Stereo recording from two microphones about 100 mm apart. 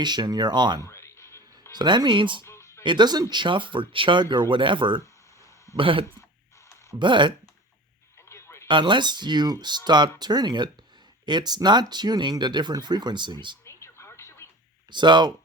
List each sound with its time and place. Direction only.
0.0 s speech: 45° right (ahead or behind)
0.8 s a sound: 25° left (ahead or behind)
1.7 s speech: 45° right (ahead or behind)
2.4 s music: 30° left (ahead or behind)
2.8 s speech: 50° right (ahead or behind)
8.3 s a sound: 30° left (ahead or behind)
8.6 s speech: 55° right (ahead or behind)
13.7 s television: 30° left (ahead or behind)
14.8 s speech: 50° right (ahead or behind)